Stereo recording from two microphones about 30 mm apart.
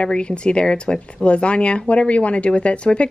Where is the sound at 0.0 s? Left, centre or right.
Left.